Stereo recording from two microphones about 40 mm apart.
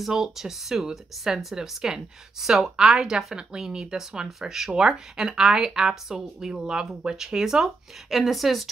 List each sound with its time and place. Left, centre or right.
0.1 s speech: centre